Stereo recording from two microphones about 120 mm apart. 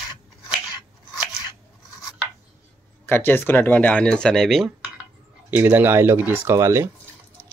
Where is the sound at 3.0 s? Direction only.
15° left (ahead or behind); by 4.7 s centre (ahead or behind).